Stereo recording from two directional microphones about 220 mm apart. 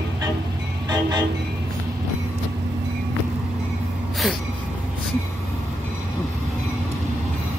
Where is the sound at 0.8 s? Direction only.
20° right (ahead or behind).